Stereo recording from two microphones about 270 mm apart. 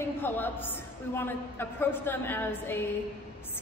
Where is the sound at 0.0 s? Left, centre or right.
Centre.